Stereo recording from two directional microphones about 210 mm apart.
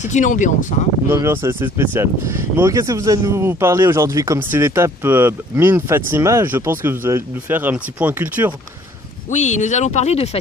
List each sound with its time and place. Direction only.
0.0 s speech: 35° left (ahead or behind)
1.0 s speech: 10° right (ahead or behind)
9.3 s speech: 35° left (ahead or behind)